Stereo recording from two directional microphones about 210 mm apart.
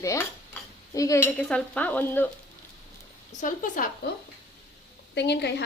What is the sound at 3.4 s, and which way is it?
Speech, 35° left (ahead or behind).